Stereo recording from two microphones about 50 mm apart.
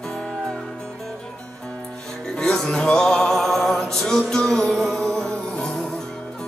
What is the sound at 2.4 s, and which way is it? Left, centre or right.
Music, centre.